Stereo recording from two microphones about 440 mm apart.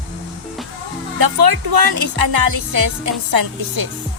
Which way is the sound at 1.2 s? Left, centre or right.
Right.